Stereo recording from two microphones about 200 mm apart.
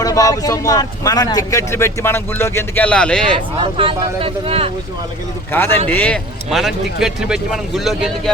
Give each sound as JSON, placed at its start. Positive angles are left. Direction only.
{"t": 0.0, "sound": "speech", "side_deg": 15}
{"t": 3.3, "sound": "speech", "side_deg": -25}
{"t": 5.5, "sound": "a man's voice", "side_deg": 10}